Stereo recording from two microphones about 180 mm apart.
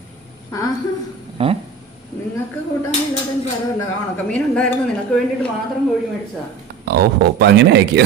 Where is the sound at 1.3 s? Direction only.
30° right (ahead or behind).